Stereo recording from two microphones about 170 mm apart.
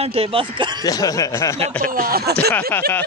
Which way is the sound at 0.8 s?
20° left (ahead or behind).